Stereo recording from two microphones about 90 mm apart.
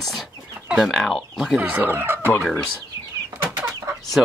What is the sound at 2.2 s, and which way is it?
Speech, 20° left (ahead or behind).